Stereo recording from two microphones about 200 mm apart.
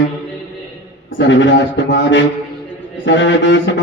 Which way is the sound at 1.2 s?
65° left (ahead or behind).